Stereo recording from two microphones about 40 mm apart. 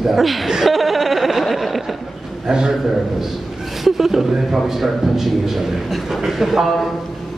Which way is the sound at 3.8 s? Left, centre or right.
Centre.